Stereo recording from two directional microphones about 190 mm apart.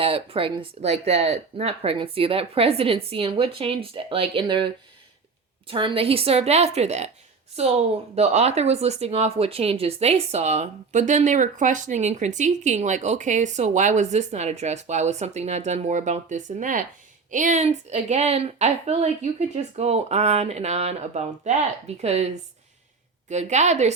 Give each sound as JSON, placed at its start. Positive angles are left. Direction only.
{"t": 0.0, "sound": "speech", "side_deg": -30}
{"t": 23.3, "sound": "speech", "side_deg": -35}